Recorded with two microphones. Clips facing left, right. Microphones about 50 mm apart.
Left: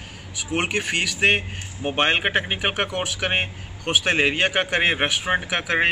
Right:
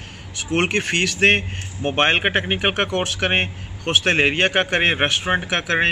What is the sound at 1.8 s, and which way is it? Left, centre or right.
Speech, right.